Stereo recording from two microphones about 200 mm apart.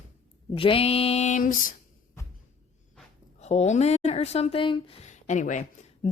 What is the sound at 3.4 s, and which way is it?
A woman's voice, 35° left (ahead or behind).